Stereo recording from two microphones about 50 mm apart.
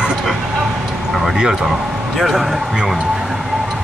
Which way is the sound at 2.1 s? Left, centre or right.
Centre.